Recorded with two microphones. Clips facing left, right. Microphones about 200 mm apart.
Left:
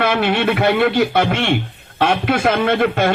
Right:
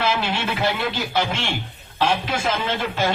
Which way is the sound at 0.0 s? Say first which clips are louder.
Left 7 dB; 60° left (ahead or behind).